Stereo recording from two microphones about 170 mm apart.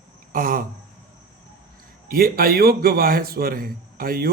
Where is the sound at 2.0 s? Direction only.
60° right (ahead or behind).